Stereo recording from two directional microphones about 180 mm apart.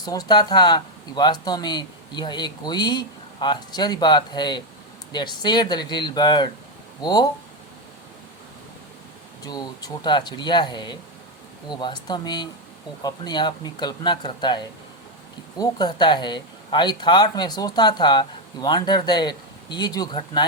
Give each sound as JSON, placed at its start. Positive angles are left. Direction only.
{"t": 0.0, "sound": "speech", "side_deg": 20}
{"t": 9.4, "sound": "speech", "side_deg": 20}